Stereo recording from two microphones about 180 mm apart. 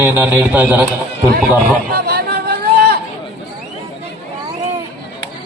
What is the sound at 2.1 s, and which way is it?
Chatter, 60° right (ahead or behind).